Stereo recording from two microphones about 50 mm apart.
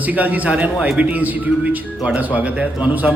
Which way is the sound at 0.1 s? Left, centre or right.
Right.